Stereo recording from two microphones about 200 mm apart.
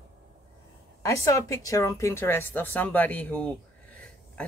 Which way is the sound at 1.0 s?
15° left (ahead or behind).